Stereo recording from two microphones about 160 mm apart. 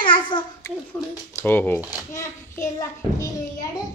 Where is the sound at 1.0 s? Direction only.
10° left (ahead or behind).